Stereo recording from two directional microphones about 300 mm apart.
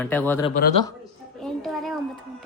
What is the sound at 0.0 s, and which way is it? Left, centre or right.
Speech, centre.